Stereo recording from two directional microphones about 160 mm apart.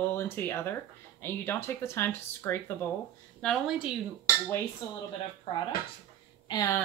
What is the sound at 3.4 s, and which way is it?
Speech, centre (ahead or behind).